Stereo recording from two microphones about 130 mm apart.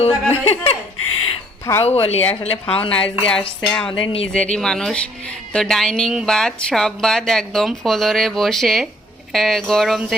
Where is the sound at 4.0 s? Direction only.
45° left (ahead or behind).